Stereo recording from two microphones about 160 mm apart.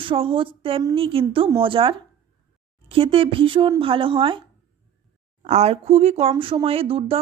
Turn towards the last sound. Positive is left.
turn(degrees=-35)  # may be behind; listen again after turning